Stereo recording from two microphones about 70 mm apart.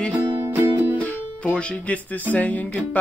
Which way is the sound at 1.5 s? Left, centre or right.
Left.